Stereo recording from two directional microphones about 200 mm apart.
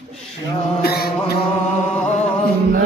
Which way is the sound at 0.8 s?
50° left (ahead or behind).